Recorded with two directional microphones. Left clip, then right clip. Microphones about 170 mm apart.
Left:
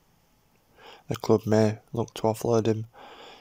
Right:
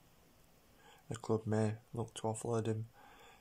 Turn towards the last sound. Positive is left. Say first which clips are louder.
# left 13 dB
turn(degrees=40)  # may be behind; listen again after turning